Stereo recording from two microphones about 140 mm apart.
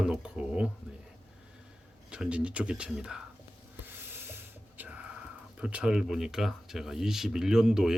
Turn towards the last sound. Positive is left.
turn(degrees=-5)  # may be behind; listen again after turning